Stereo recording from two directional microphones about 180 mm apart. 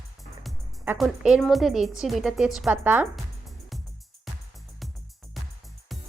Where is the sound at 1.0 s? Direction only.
Centre (ahead or behind).